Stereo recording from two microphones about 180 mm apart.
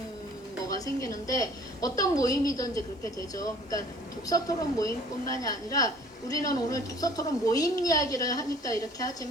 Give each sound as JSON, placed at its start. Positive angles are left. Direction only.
{"t": 1.3, "sound": "a woman's voice", "side_deg": 20}